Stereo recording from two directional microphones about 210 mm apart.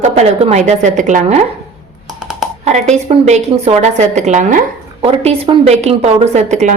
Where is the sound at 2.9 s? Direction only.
30° right (ahead or behind).